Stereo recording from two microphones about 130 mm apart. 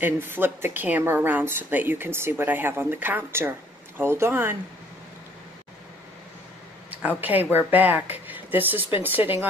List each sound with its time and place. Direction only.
0.0 s a woman's voice: 15° right (ahead or behind)
6.9 s a woman's voice: 10° right (ahead or behind)